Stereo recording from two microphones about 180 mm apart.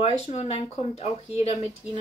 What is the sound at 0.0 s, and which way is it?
Speech, 35° left (ahead or behind).